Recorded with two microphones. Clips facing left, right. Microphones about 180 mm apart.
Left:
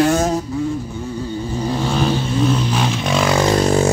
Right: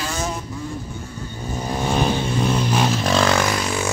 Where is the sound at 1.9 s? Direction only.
10° right (ahead or behind).